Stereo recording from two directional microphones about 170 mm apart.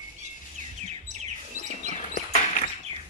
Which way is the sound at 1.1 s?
45° right (ahead or behind).